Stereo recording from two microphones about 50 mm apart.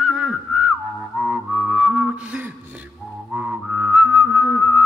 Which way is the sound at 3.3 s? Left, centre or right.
Right.